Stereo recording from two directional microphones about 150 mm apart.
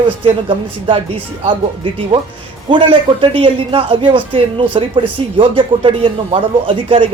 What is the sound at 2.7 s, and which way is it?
Speech, 35° right (ahead or behind).